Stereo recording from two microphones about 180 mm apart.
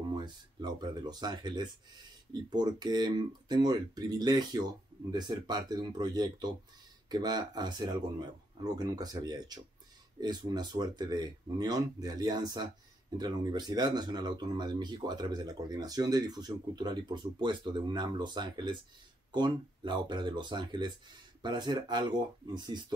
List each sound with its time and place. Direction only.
0.1 s speech: 25° right (ahead or behind)